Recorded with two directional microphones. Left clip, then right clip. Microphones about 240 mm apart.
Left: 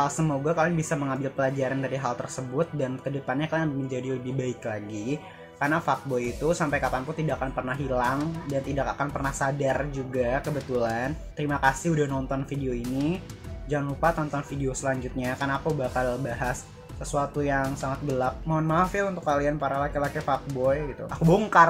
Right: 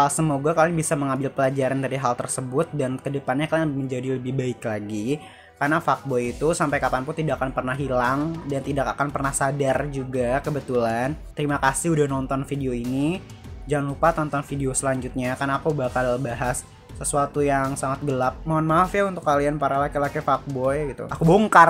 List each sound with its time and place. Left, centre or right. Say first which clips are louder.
0.0 s speech: right 5 dB; right